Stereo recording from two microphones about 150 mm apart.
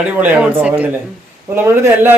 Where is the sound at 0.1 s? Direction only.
10° right (ahead or behind).